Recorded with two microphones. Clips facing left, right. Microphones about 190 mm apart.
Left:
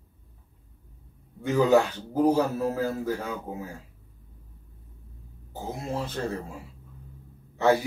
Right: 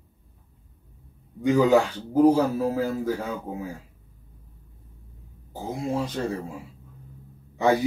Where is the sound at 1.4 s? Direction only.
15° right (ahead or behind).